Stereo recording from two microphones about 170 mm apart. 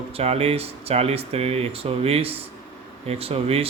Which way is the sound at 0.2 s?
35° right (ahead or behind).